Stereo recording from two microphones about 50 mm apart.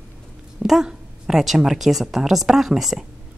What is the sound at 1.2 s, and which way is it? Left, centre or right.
A man's voice, centre.